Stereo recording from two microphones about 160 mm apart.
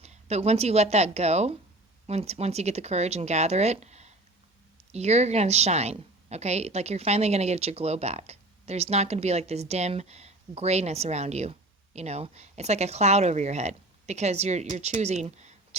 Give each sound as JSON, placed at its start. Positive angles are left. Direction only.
{"t": 0.0, "sound": "a woman's voice", "side_deg": -45}